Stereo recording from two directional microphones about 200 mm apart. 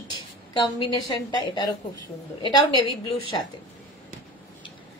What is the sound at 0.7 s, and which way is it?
A woman's voice, 25° left (ahead or behind).